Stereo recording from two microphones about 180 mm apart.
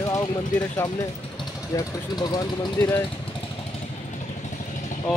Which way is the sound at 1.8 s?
20° left (ahead or behind).